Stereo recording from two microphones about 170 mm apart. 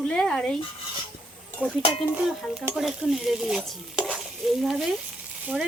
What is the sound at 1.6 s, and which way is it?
Speech, 5° right (ahead or behind).